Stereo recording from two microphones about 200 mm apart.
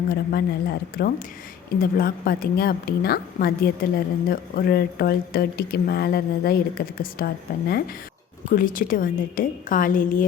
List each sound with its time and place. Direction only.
0.1 s a woman's voice: 50° left (ahead or behind)